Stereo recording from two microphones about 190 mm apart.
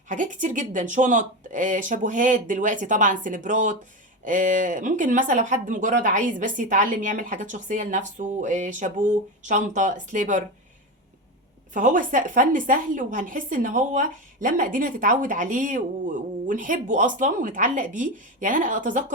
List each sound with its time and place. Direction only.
0.1 s speech: 40° right (ahead or behind)
11.7 s speech: 40° right (ahead or behind)